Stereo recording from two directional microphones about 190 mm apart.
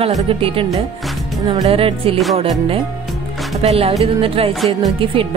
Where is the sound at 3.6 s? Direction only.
30° right (ahead or behind).